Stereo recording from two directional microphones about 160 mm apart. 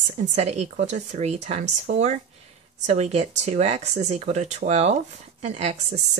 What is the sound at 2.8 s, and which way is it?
A woman's voice, 45° right (ahead or behind).